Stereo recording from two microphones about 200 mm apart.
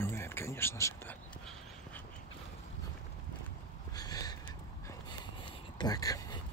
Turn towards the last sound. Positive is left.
turn(degrees=20)  # may be behind; listen again after turning